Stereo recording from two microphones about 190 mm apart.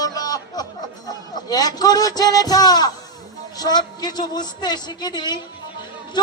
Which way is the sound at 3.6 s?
20° left (ahead or behind).